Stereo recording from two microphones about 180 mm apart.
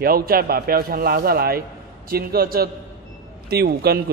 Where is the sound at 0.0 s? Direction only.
55° right (ahead or behind).